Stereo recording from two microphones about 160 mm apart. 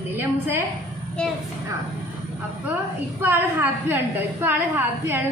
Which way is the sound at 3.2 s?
15° right (ahead or behind).